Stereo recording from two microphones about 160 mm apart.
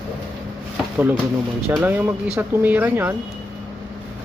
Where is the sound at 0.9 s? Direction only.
10° right (ahead or behind).